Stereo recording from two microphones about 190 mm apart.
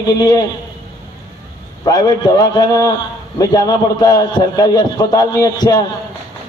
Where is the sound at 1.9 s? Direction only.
20° left (ahead or behind).